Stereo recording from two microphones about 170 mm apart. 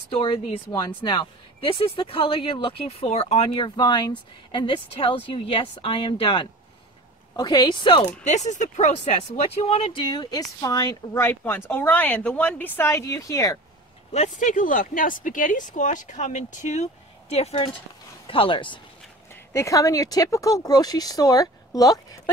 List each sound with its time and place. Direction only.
0.2 s speech: 30° left (ahead or behind)
8.2 s speech: 45° left (ahead or behind); by 13.6 s 20° left (ahead or behind)
14.1 s speech: 45° left (ahead or behind); by 18.8 s 30° left (ahead or behind)
19.5 s speech: 20° left (ahead or behind)